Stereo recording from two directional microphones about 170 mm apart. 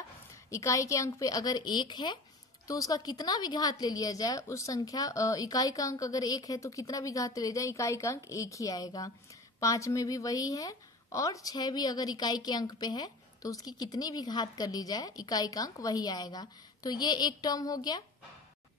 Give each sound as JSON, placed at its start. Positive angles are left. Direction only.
{"t": 0.5, "sound": "a woman's voice", "side_deg": 20}